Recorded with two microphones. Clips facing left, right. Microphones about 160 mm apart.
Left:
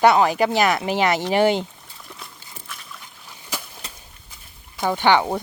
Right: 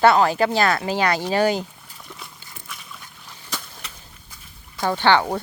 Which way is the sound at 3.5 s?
10° left (ahead or behind).